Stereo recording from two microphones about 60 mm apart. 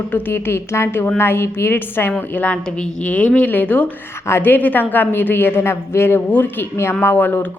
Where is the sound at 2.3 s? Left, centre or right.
Left.